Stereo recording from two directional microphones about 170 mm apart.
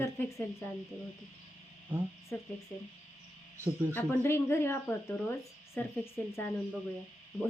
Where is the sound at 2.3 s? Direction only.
10° left (ahead or behind).